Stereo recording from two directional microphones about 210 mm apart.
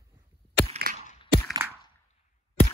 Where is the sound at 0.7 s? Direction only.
45° right (ahead or behind).